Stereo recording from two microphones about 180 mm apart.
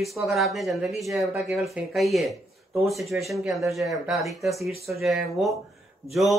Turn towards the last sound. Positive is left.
turn(degrees=0)  # may be behind; listen again after turning